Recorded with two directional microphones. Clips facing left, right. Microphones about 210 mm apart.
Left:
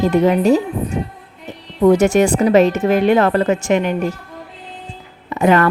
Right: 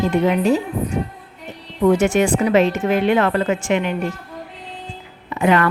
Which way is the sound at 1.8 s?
40° left (ahead or behind).